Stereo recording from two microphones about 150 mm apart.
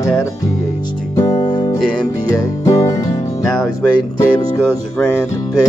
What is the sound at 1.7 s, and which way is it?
Music, 5° left (ahead or behind).